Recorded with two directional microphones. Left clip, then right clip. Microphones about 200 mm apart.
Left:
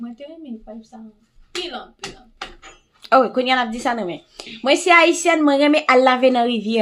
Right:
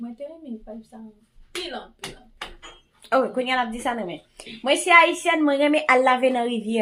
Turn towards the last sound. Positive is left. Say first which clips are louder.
# left 6 dB
turn(degrees=45)  # may be behind; listen again after turning